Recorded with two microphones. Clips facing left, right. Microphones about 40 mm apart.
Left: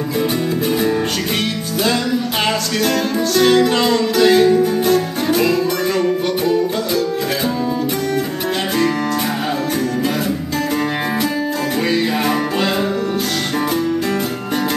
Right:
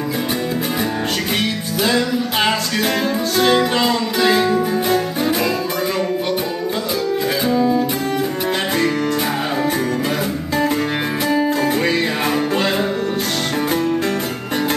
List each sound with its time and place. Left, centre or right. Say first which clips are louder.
3.3 s music: left 3 dB; centre
12.5 s music: even; right